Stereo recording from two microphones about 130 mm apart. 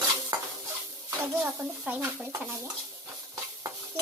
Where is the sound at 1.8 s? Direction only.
15° right (ahead or behind).